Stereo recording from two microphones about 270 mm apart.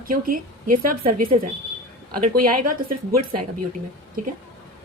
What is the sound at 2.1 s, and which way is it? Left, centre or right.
Speech, right.